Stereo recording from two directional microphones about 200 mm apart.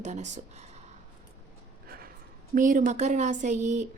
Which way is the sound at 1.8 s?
50° right (ahead or behind).